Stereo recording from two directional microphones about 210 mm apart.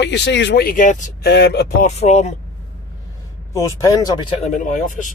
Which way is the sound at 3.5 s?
20° left (ahead or behind).